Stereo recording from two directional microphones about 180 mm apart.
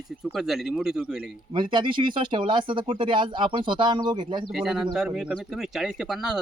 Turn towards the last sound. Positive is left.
turn(degrees=0)  # may be behind; listen again after turning